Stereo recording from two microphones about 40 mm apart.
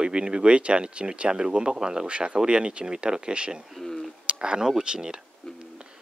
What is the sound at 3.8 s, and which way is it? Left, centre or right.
Speech, centre.